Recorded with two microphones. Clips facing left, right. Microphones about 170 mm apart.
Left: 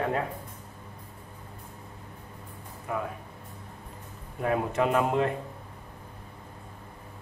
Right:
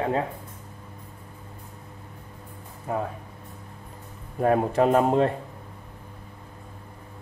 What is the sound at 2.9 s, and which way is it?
Speech, 35° right (ahead or behind).